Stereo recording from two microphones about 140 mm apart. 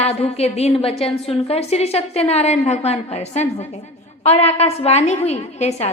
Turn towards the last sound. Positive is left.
turn(degrees=50)  # may be behind; listen again after turning